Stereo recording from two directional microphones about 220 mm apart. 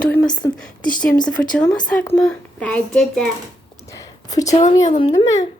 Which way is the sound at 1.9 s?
5° left (ahead or behind).